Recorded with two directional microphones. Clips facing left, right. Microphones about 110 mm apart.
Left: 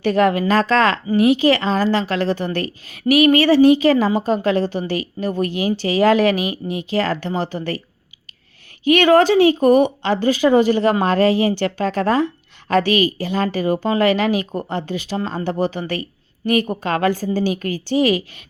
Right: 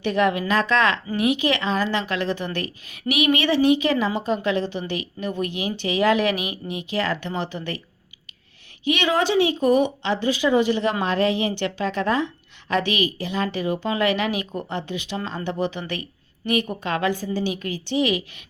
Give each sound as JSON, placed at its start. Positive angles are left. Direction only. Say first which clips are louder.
{"t": 0.0, "sound": "a woman's voice", "louder": "left 5 dB", "side_deg": 40}
{"t": 8.8, "sound": "a woman's voice", "louder": "left 9 dB", "side_deg": 50}